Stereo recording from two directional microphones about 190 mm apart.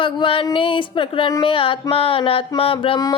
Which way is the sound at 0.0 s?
25° left (ahead or behind).